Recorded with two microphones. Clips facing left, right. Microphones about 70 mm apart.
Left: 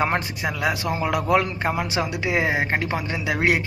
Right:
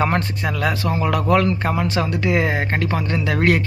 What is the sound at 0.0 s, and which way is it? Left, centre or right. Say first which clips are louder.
Speech: right 3 dB; centre.